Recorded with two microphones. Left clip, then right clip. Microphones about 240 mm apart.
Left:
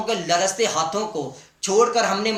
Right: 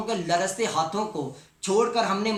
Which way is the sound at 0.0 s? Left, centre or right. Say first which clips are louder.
Left 4 dB; centre.